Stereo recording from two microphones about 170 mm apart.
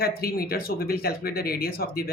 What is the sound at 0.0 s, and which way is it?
Speech, 60° left (ahead or behind).